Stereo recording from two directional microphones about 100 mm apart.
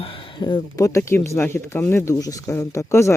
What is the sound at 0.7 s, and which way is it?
Speech, 30° left (ahead or behind).